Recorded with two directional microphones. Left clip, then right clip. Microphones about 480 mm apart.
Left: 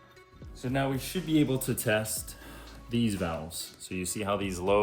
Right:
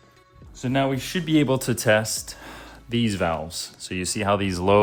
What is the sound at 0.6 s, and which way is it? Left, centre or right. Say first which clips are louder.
Speech: right 7 dB; centre.